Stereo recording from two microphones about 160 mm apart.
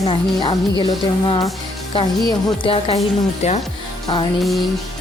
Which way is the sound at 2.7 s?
35° left (ahead or behind).